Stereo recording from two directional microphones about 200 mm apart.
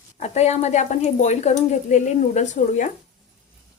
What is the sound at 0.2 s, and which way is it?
A woman's voice, 35° left (ahead or behind).